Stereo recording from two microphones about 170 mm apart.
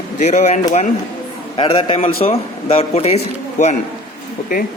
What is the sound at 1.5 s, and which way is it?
A man's voice, 30° left (ahead or behind).